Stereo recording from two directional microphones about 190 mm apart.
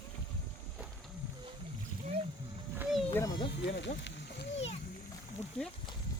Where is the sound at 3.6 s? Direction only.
65° left (ahead or behind).